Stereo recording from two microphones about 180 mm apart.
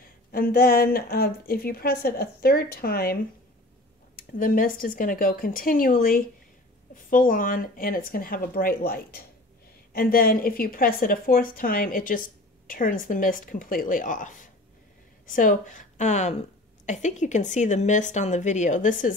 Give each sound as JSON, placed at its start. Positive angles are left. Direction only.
{"t": 0.3, "sound": "a woman's voice", "side_deg": 55}
{"t": 4.2, "sound": "a woman's voice", "side_deg": 50}